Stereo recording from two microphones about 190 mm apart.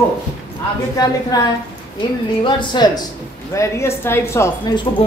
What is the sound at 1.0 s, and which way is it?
Speech, 20° left (ahead or behind).